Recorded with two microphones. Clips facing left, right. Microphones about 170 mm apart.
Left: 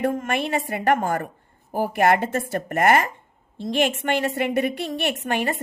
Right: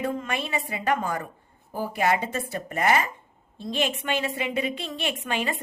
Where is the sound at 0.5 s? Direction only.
50° left (ahead or behind).